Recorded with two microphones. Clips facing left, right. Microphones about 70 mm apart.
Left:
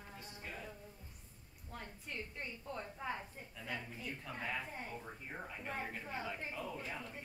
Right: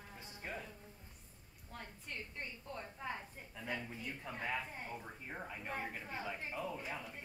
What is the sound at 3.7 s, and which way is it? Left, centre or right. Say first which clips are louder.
A woman's voice: right 1 dB; centre.